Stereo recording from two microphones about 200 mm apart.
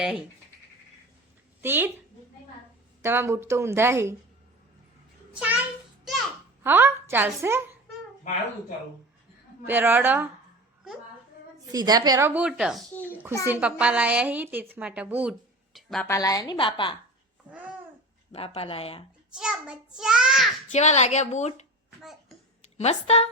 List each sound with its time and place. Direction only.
1.6 s a woman's voice: 10° right (ahead or behind)
3.0 s a woman's voice: 10° right (ahead or behind)
5.3 s a child's voice: 5° right (ahead or behind)
9.6 s a woman's voice: 10° right (ahead or behind)
11.7 s a woman's voice: 20° right (ahead or behind); by 16.0 s centre (ahead or behind)
16.0 s a woman's voice: 15° left (ahead or behind)
18.3 s a woman's voice: 30° left (ahead or behind)
19.3 s a child's voice: 5° right (ahead or behind)
20.7 s a woman's voice: 35° left (ahead or behind)